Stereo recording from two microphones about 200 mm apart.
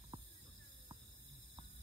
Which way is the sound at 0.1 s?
25° right (ahead or behind).